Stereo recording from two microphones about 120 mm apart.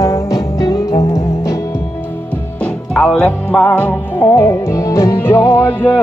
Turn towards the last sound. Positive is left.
turn(degrees=15)  # may be behind; listen again after turning